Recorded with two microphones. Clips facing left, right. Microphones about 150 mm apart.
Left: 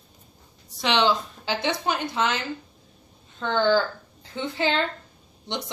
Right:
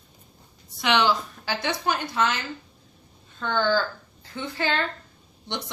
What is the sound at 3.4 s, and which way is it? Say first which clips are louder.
A woman's voice: left 2 dB; 20° left (ahead or behind).